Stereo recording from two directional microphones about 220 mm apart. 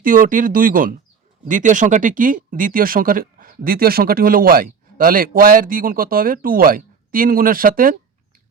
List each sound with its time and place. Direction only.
0.0 s speech: 40° right (ahead or behind)